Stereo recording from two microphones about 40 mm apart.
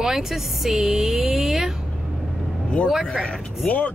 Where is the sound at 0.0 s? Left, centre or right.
Centre.